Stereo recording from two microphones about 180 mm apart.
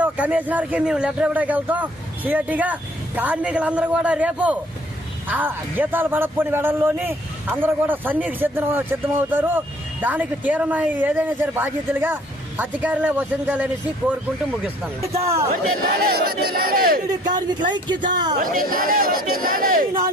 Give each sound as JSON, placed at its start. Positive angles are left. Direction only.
{"t": 0.0, "sound": "a man's voice", "side_deg": -10}
{"t": 15.2, "sound": "a man's voice", "side_deg": -15}
{"t": 15.8, "sound": "speech", "side_deg": -55}
{"t": 17.1, "sound": "speech", "side_deg": -25}
{"t": 18.3, "sound": "speech", "side_deg": -50}